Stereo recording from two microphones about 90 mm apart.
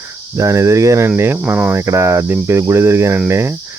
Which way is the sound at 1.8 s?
35° right (ahead or behind).